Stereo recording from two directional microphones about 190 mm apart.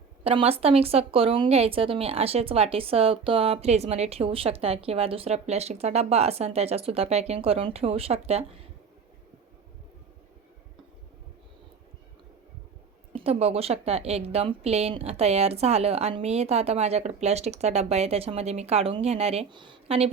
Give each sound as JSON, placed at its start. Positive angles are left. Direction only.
{"t": 0.3, "sound": "speech", "side_deg": -30}
{"t": 13.1, "sound": "speech", "side_deg": -30}